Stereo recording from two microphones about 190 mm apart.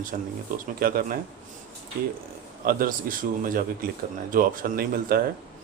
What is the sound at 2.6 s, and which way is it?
Speech, 45° right (ahead or behind).